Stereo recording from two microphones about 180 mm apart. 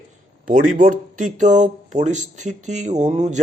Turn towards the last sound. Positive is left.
turn(degrees=-40)  # may be behind; listen again after turning